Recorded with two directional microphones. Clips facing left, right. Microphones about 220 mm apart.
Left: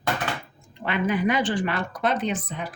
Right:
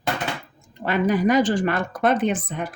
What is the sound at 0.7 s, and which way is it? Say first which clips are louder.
A woman's voice: right 4 dB; 40° right (ahead or behind).